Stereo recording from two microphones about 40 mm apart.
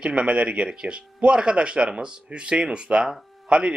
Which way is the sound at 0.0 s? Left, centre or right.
Right.